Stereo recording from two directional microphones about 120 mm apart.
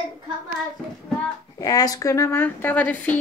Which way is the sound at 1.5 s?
30° left (ahead or behind).